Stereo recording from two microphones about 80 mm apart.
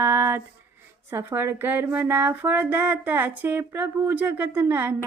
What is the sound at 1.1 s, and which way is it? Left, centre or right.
Speech, right.